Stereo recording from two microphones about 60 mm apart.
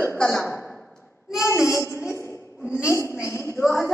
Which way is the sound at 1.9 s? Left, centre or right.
Left.